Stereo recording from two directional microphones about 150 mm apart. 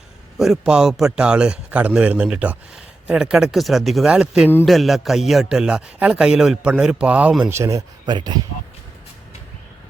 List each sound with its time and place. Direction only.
0.3 s a man's voice: centre (ahead or behind)
7.5 s speech: 20° right (ahead or behind)